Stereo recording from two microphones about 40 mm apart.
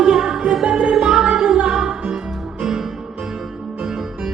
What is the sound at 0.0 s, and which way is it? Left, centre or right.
Music, centre.